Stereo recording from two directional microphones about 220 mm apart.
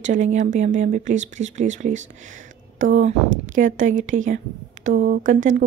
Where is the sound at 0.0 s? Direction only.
35° right (ahead or behind).